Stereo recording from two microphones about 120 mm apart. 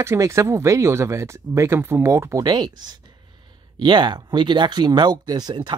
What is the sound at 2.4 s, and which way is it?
Speech, 35° right (ahead or behind).